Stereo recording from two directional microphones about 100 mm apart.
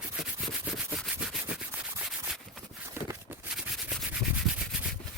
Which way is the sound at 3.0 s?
25° right (ahead or behind).